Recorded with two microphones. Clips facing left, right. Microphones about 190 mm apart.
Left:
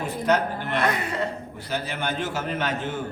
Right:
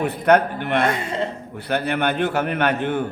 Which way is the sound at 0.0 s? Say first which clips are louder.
Right 6 dB; 60° right (ahead or behind).